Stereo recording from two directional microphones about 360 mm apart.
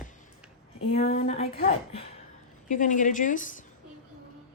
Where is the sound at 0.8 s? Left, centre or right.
Centre.